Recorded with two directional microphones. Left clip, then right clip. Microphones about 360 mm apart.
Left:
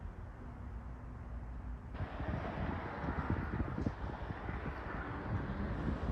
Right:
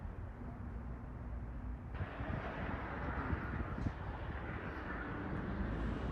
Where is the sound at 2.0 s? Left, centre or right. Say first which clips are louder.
Left 1 dB; left.